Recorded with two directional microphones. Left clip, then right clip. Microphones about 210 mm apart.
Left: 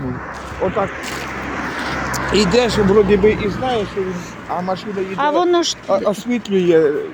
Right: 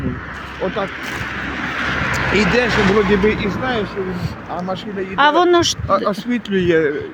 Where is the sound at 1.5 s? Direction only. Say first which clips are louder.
Right 2 dB; 55° right (ahead or behind).